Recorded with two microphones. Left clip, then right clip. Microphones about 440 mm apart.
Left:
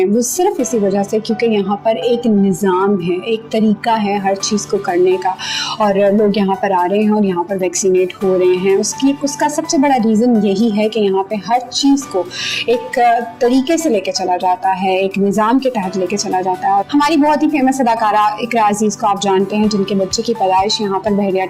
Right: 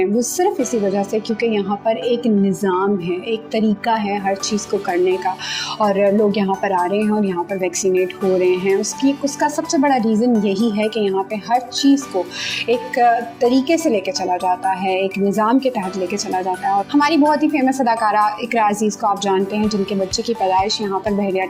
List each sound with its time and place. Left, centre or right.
0.0 s a woman's voice: left